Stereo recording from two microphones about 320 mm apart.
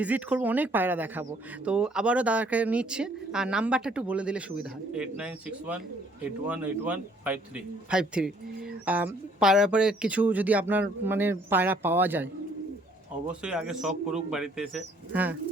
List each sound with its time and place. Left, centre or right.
0.0 s speech: centre
13.4 s speech: centre